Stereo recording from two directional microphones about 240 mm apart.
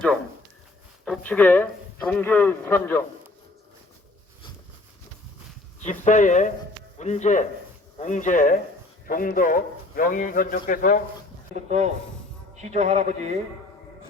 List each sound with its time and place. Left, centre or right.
1.0 s a man's voice: centre
5.8 s a man's voice: left
11.5 s speech: right